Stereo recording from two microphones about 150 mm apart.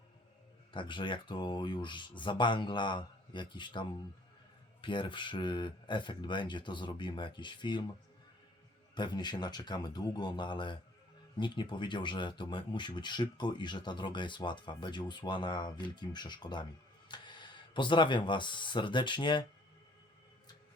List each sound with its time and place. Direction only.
0.7 s speech: 30° left (ahead or behind)
9.0 s a man's voice: 30° left (ahead or behind)